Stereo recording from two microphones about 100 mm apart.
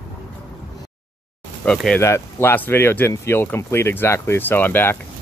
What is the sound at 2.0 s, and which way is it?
Speech, 25° left (ahead or behind).